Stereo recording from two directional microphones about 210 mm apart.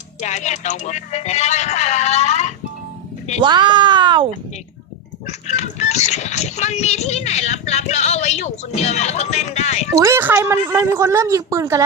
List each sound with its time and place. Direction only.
0.2 s speech: 35° left (ahead or behind)
3.4 s speech: 20° right (ahead or behind)
5.5 s speech: 30° left (ahead or behind)
10.0 s speech: 10° right (ahead or behind)